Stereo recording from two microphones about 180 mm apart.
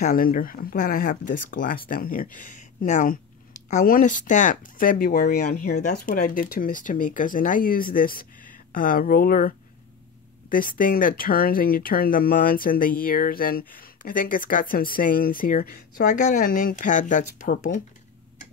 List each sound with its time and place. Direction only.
0.0 s speech: 50° left (ahead or behind)
10.5 s speech: 50° left (ahead or behind)